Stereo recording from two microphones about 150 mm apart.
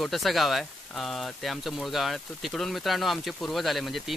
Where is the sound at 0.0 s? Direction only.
Centre (ahead or behind).